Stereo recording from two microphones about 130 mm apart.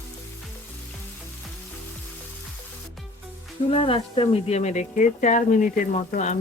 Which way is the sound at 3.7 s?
45° left (ahead or behind).